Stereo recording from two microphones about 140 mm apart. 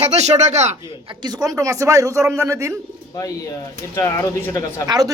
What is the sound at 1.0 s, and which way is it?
A man's voice, 30° right (ahead or behind).